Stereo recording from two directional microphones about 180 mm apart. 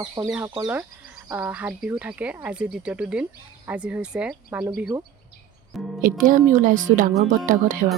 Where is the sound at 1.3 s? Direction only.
10° right (ahead or behind).